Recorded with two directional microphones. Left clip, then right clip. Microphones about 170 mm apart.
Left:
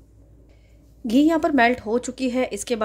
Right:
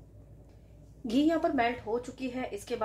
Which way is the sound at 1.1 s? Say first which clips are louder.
Left 9 dB; 40° left (ahead or behind).